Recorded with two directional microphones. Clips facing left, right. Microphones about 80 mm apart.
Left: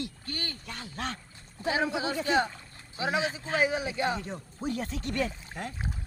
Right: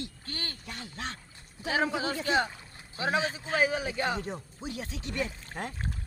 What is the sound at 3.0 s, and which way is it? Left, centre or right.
Speech, right.